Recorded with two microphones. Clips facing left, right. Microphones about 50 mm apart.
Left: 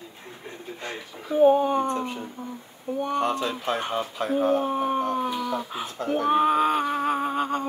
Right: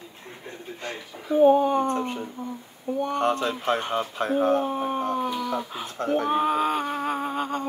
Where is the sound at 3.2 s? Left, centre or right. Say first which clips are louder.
Right 5 dB; right.